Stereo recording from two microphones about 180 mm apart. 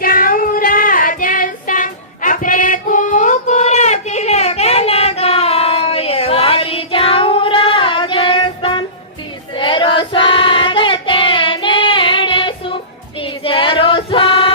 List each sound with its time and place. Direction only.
0.0 s child singing: 50° left (ahead or behind); by 14.5 s 30° left (ahead or behind)